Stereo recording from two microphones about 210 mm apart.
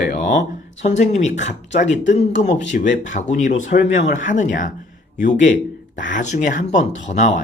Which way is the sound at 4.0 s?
60° left (ahead or behind).